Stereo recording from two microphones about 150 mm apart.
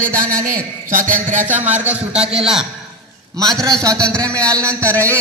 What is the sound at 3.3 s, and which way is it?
A man's voice, 25° right (ahead or behind).